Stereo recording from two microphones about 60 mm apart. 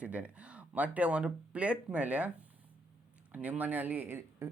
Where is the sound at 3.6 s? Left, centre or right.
Right.